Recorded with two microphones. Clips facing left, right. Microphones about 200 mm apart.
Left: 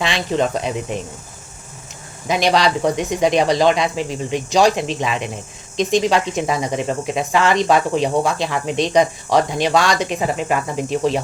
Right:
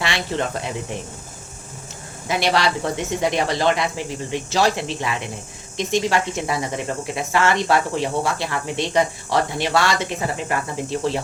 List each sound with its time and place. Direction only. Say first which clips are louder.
0.0 s speech: left 5 dB; 20° left (ahead or behind)
2.2 s speech: left 4 dB; 20° left (ahead or behind)